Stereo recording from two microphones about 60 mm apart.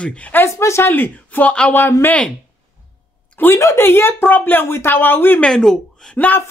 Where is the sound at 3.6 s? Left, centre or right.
Left.